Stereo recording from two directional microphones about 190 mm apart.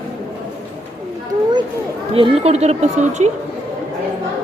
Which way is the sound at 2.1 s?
30° right (ahead or behind).